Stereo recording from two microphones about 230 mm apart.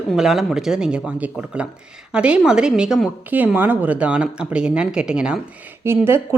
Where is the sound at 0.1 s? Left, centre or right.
Centre.